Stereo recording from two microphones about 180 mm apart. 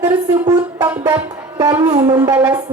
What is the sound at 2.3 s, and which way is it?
Speech, 10° right (ahead or behind).